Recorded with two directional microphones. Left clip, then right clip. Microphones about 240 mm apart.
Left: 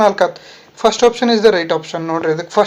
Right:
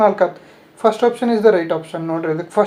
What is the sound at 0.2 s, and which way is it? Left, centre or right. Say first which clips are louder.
Speech: left 2 dB; centre.